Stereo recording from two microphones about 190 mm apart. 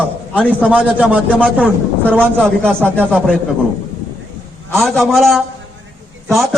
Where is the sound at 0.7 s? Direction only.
5° right (ahead or behind).